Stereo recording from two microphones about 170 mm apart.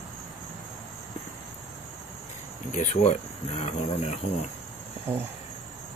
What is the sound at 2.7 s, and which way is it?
Speech, 45° left (ahead or behind).